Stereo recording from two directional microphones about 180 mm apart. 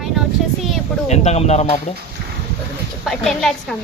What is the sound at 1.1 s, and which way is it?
Speech, 35° left (ahead or behind).